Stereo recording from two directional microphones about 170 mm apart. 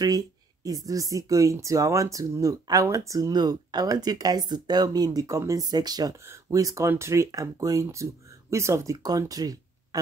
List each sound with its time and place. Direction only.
0.7 s speech: 20° right (ahead or behind)